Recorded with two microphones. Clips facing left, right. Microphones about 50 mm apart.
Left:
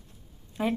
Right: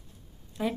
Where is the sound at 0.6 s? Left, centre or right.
Left.